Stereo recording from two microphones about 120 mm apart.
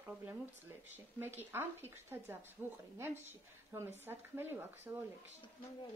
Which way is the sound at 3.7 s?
20° right (ahead or behind).